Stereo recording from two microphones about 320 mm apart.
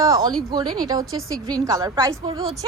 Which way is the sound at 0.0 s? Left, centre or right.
Centre.